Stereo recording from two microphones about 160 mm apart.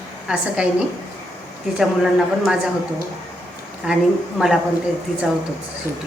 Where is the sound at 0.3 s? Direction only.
5° right (ahead or behind).